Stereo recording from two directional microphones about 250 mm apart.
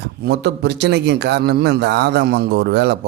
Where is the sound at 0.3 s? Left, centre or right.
Right.